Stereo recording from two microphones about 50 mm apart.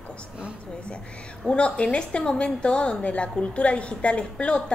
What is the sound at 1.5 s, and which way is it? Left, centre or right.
A woman's voice, left.